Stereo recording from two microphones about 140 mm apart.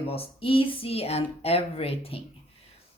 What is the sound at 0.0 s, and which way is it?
A woman's voice, 45° left (ahead or behind).